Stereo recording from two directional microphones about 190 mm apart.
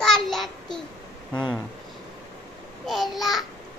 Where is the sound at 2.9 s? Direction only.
Centre (ahead or behind).